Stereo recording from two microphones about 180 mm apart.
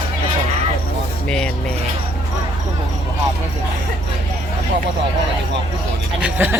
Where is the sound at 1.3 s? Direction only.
5° left (ahead or behind).